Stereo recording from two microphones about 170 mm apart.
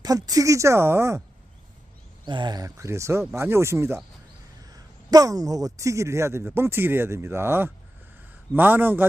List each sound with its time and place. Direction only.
0.0 s a man's voice: 20° right (ahead or behind)
2.2 s a man's voice: 25° right (ahead or behind); by 9.0 s 10° right (ahead or behind)